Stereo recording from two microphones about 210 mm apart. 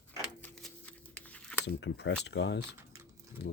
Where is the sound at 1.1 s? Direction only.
5° left (ahead or behind).